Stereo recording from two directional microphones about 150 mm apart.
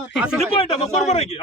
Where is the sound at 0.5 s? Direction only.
40° left (ahead or behind).